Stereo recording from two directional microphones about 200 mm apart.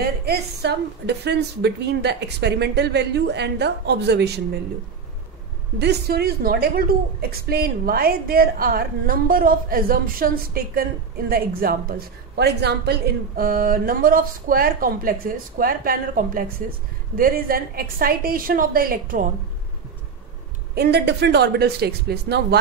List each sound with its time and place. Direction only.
0.0 s a woman's voice: 55° right (ahead or behind)
5.8 s a woman's voice: 55° right (ahead or behind)
20.7 s a woman's voice: 55° right (ahead or behind)